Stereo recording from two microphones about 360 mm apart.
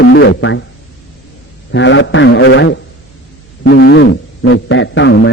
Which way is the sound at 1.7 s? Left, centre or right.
Left.